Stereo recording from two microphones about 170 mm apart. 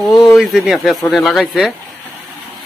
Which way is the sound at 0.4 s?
Centre (ahead or behind).